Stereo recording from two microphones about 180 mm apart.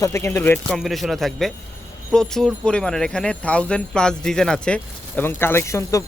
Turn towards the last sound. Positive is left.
turn(degrees=15)  # may be behind; listen again after turning